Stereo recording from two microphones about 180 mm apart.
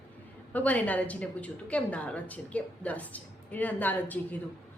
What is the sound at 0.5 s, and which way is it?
A woman's voice, 10° left (ahead or behind).